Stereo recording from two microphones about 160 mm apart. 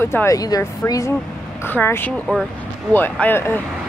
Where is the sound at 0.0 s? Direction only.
15° left (ahead or behind).